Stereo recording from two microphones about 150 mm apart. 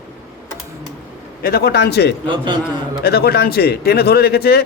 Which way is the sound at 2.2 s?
35° right (ahead or behind).